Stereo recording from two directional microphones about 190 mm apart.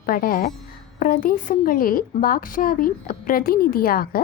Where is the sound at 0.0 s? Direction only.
50° left (ahead or behind).